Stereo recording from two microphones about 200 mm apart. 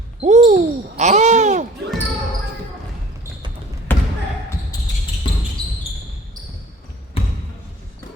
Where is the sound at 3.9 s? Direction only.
10° left (ahead or behind).